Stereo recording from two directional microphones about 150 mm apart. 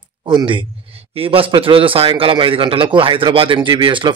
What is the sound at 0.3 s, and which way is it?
A man's voice, 30° right (ahead or behind).